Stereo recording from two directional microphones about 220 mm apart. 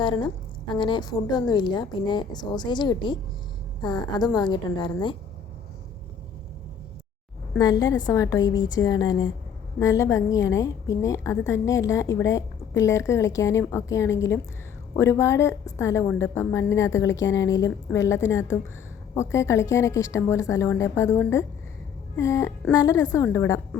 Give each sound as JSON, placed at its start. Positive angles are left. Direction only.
{"t": 0.0, "sound": "a woman's voice", "side_deg": 20}
{"t": 7.6, "sound": "a woman's voice", "side_deg": 15}